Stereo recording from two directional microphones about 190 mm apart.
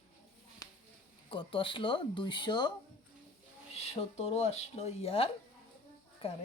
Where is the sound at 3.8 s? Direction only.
35° left (ahead or behind).